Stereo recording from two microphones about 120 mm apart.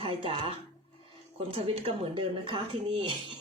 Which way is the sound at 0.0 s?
50° right (ahead or behind).